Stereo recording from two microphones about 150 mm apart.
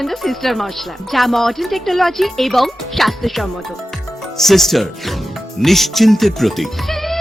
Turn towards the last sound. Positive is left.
turn(degrees=0)  # may be behind; listen again after turning